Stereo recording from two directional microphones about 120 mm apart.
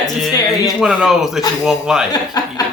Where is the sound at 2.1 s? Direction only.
30° left (ahead or behind).